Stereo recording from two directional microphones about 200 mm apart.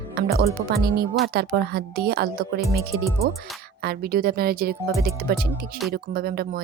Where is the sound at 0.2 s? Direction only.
50° right (ahead or behind).